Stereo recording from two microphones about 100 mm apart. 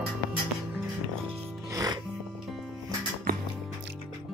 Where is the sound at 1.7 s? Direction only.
40° right (ahead or behind).